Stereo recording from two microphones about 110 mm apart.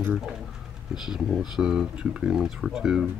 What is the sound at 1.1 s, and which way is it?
Speech, centre (ahead or behind).